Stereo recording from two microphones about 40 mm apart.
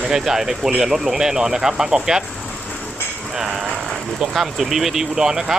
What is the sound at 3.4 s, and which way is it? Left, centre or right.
Speech, centre.